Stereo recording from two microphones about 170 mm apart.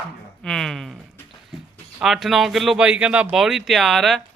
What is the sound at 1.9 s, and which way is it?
Speech, centre (ahead or behind).